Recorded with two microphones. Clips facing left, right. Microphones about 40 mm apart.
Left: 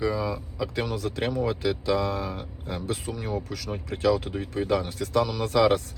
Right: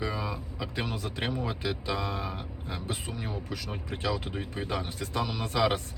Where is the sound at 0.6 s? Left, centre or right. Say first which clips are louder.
Left 6 dB; right.